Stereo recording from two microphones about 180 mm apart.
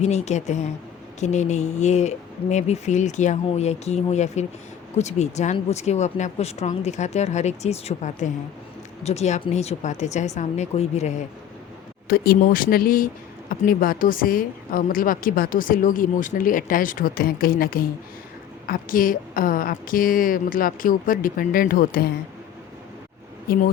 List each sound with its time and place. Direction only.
0.0 s speech: 40° left (ahead or behind)
12.0 s a woman's voice: 55° left (ahead or behind)
23.5 s speech: 55° left (ahead or behind)